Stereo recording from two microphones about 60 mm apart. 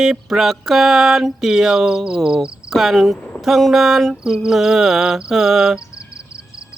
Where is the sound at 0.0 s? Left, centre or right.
Centre.